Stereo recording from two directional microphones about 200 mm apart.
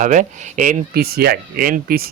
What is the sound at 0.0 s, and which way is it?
Speech, 40° right (ahead or behind).